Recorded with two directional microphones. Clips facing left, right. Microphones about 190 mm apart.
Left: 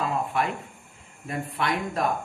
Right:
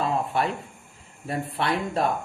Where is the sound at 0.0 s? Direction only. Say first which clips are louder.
Right 2 dB; 35° right (ahead or behind).